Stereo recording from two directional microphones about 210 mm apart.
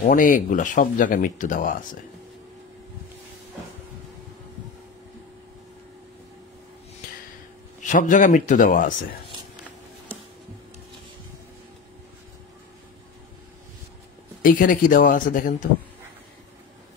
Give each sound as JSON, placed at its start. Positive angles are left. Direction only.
{"t": 0.0, "sound": "speech", "side_deg": 40}
{"t": 7.8, "sound": "speech", "side_deg": 35}
{"t": 14.4, "sound": "speech", "side_deg": 40}